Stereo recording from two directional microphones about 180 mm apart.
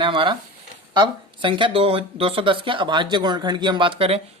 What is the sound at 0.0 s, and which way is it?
Speech, 30° right (ahead or behind).